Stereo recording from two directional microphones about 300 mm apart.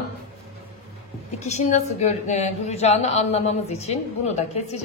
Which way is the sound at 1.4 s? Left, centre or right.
Left.